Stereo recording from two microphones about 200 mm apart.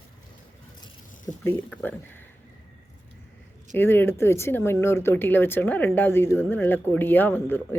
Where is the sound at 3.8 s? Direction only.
10° left (ahead or behind).